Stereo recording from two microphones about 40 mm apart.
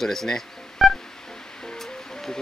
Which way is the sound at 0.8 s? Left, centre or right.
Centre.